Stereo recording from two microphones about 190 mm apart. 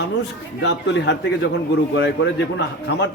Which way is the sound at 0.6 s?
65° left (ahead or behind).